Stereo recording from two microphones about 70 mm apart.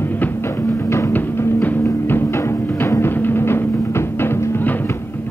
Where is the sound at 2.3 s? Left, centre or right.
Left.